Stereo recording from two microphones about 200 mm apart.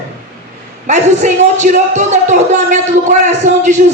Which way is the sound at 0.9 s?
35° right (ahead or behind).